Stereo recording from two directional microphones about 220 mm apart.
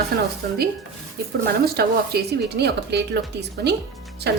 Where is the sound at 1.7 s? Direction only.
45° right (ahead or behind).